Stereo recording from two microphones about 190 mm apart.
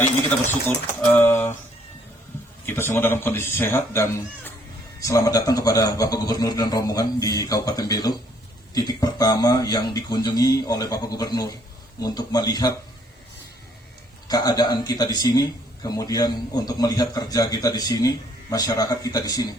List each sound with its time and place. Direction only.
1.1 s speech: 10° left (ahead or behind)
2.6 s speech: 15° left (ahead or behind)
14.3 s speech: 20° left (ahead or behind)